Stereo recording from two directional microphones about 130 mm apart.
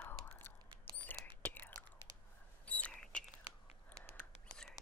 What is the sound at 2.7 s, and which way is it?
Rodents, 5° left (ahead or behind).